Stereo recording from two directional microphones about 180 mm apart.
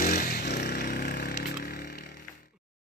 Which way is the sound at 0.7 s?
60° left (ahead or behind).